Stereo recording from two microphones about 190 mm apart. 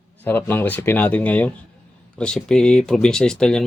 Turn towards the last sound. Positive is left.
turn(degrees=5)  # may be behind; listen again after turning